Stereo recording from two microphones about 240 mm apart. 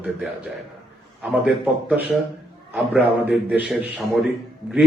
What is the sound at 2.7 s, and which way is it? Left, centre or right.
A man's voice, centre.